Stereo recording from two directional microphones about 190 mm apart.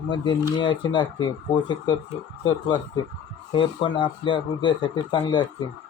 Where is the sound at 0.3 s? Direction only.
25° left (ahead or behind).